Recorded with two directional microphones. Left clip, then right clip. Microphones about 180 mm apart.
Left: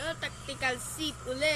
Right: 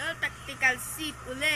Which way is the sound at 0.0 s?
30° left (ahead or behind).